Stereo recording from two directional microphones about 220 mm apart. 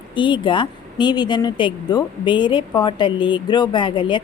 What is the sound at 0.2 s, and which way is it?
A woman's voice, 20° left (ahead or behind).